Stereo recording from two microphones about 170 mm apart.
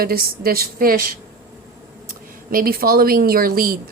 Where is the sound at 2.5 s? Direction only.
60° right (ahead or behind).